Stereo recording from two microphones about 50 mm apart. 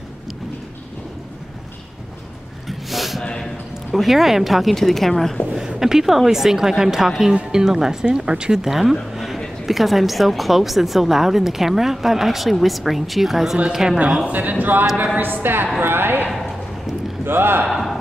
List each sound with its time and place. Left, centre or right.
2.9 s a sound: centre
3.9 s a woman's voice: centre
5.7 s a woman's voice: centre
8.6 s a woman's voice: centre
9.1 s a sound: centre
9.7 s a woman's voice: centre
14.3 s a man's voice: right
16.3 s a sound: centre
17.2 s a man's voice: right
17.6 s speech: centre